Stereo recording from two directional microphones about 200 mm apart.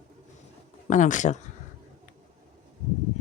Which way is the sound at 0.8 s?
40° left (ahead or behind).